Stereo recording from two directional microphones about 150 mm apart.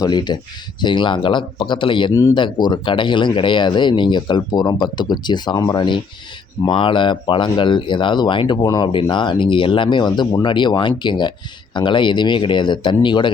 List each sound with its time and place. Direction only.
0.0 s speech: 30° left (ahead or behind)